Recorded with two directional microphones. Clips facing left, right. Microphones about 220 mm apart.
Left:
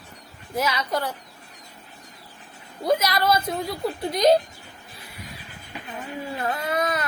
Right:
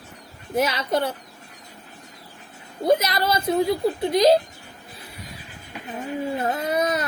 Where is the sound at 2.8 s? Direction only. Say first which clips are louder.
Right 2 dB; 25° right (ahead or behind).